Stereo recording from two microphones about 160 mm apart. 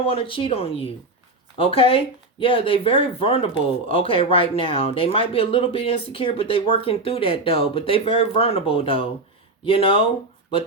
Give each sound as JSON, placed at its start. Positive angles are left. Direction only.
{"t": 0.0, "sound": "speech", "side_deg": 35}